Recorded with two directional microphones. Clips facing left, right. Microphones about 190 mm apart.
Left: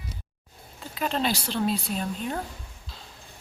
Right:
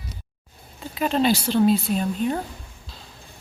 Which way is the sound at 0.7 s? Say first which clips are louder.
Right 6 dB; 5° right (ahead or behind).